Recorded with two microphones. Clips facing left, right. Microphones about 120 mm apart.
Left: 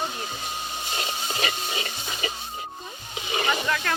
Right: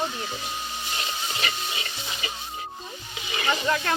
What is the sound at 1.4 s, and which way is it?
Music, 35° left (ahead or behind).